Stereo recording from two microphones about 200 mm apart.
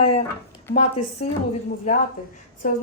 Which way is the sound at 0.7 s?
35° left (ahead or behind).